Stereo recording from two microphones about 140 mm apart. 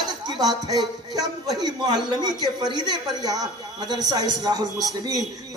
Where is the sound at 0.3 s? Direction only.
30° right (ahead or behind).